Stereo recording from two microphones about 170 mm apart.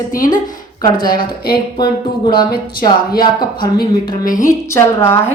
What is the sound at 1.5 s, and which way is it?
A woman's voice, 25° left (ahead or behind).